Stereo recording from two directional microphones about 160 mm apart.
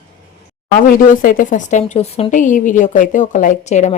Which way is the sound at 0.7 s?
60° left (ahead or behind).